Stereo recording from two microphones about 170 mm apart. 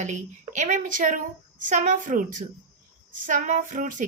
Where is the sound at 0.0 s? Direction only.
45° right (ahead or behind).